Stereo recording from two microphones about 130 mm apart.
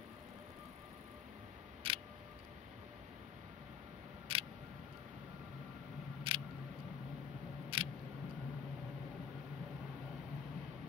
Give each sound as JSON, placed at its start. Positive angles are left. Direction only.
{"t": 1.8, "sound": "camera", "side_deg": -45}
{"t": 4.3, "sound": "single-lens reflex camera", "side_deg": -45}
{"t": 6.3, "sound": "single-lens reflex camera", "side_deg": -45}
{"t": 7.7, "sound": "a sound", "side_deg": -45}